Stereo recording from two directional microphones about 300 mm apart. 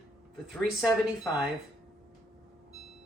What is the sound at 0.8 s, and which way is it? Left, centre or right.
Speech, centre.